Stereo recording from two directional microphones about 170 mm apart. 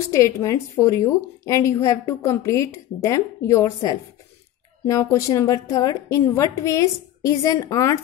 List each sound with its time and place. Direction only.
0.0 s a woman's voice: 15° left (ahead or behind)